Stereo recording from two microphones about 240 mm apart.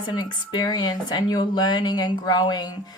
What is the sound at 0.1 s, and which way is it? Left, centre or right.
Speech, centre.